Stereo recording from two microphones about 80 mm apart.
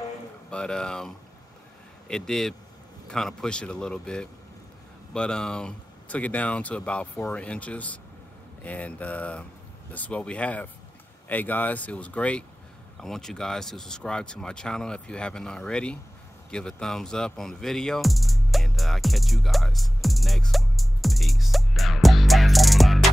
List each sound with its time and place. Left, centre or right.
0.5 s speech: centre
13.0 s speech: centre
16.4 s music: centre